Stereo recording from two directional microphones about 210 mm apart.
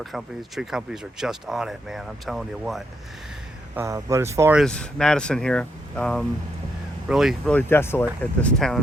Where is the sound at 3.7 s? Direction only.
15° right (ahead or behind).